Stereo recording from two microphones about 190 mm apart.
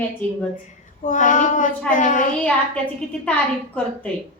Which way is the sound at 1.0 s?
40° left (ahead or behind).